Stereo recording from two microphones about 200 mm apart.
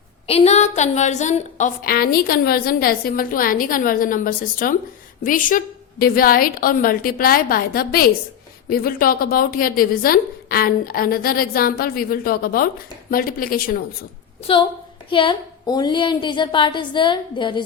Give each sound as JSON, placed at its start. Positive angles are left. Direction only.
{"t": 0.3, "sound": "a woman's voice", "side_deg": 30}
{"t": 14.5, "sound": "a woman's voice", "side_deg": 30}